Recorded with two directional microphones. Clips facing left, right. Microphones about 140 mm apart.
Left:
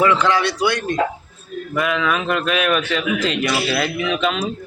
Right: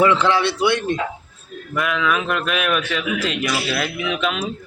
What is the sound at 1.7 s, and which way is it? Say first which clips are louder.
A man's voice: left 1 dB; centre (ahead or behind).